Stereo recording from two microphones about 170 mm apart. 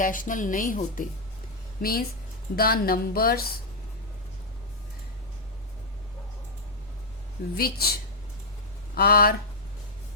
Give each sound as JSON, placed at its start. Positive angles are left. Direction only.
{"t": 0.0, "sound": "a woman's voice", "side_deg": 50}
{"t": 7.5, "sound": "speech", "side_deg": 65}
{"t": 9.0, "sound": "speech", "side_deg": 65}